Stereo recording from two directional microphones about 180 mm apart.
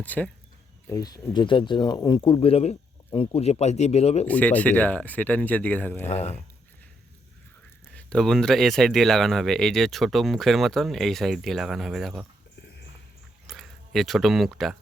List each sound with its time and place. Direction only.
0.0 s speech: 10° left (ahead or behind)
0.9 s speech: 20° left (ahead or behind)
4.3 s speech: 10° left (ahead or behind)
6.1 s speech: 35° left (ahead or behind)
7.9 s speech: 5° left (ahead or behind)
13.5 s speech: centre (ahead or behind)